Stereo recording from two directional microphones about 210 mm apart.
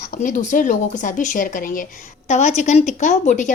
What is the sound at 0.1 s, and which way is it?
Speech, 40° left (ahead or behind).